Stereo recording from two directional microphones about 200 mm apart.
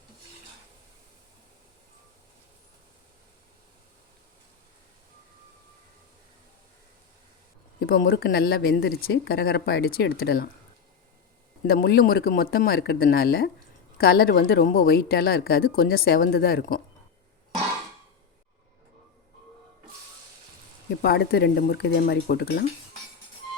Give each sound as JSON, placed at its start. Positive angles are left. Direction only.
{"t": 7.8, "sound": "speech", "side_deg": 50}
{"t": 11.6, "sound": "speech", "side_deg": 50}
{"t": 21.0, "sound": "speech", "side_deg": 55}